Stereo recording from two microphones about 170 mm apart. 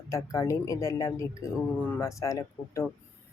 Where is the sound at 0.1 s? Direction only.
20° left (ahead or behind).